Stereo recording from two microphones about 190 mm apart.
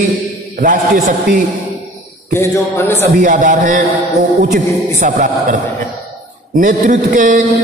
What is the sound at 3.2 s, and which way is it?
Speech, 40° right (ahead or behind).